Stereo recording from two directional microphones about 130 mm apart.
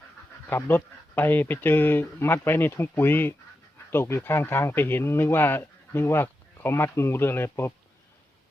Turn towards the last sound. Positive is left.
turn(degrees=20)  # may be behind; listen again after turning